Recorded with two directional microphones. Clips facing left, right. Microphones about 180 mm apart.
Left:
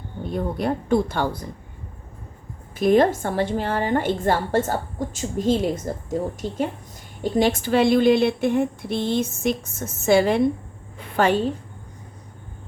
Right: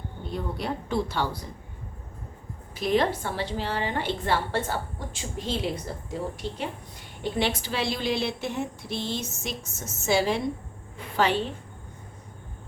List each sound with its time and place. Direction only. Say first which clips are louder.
0.3 s a woman's voice: left 7 dB; 50° left (ahead or behind)
2.7 s a woman's voice: left 7 dB; 50° left (ahead or behind)